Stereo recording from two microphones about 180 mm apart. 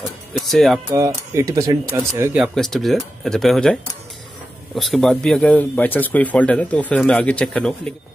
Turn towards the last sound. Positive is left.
turn(degrees=5)  # may be behind; listen again after turning